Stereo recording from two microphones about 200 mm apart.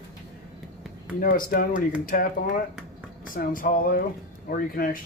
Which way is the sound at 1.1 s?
45° left (ahead or behind).